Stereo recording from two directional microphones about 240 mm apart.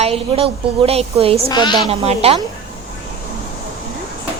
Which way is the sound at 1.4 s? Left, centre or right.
Centre.